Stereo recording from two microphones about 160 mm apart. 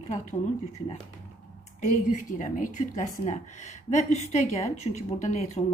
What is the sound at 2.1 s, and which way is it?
A woman's voice, 55° left (ahead or behind).